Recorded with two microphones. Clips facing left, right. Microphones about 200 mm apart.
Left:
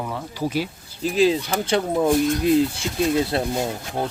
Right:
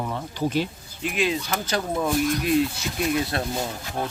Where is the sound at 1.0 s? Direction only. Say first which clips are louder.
Left 7 dB; 35° left (ahead or behind).